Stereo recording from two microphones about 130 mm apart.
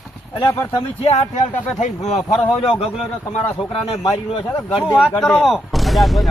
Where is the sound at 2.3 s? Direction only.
Centre (ahead or behind).